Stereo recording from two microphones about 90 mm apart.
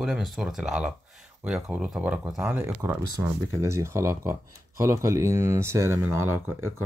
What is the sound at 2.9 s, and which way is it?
Speech, 30° right (ahead or behind).